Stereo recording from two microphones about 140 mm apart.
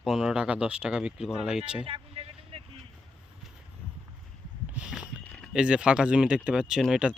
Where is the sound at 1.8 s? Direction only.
40° right (ahead or behind).